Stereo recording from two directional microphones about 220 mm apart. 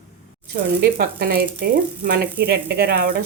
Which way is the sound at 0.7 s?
45° right (ahead or behind).